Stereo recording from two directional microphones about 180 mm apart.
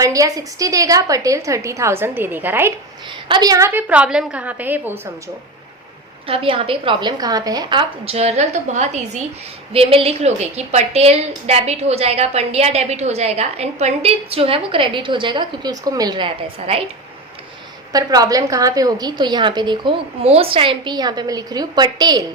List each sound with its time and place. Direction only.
0.0 s a woman's voice: 20° right (ahead or behind)
3.2 s a woman's voice: 25° right (ahead or behind)
6.2 s a woman's voice: 30° right (ahead or behind)
17.9 s a woman's voice: 20° right (ahead or behind)